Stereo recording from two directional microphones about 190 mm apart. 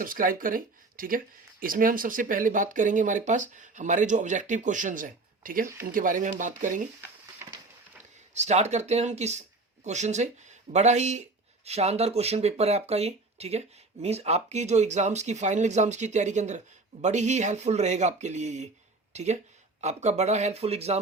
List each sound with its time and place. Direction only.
0.0 s speech: 45° right (ahead or behind)
8.3 s speech: 35° right (ahead or behind)